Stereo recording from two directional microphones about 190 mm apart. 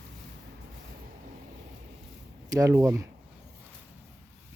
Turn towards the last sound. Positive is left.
turn(degrees=-15)  # may be behind; listen again after turning